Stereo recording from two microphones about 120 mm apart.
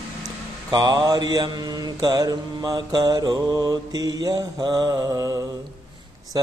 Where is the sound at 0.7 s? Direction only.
35° right (ahead or behind).